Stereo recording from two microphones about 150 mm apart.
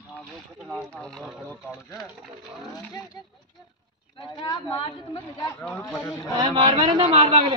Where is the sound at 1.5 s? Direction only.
20° left (ahead or behind).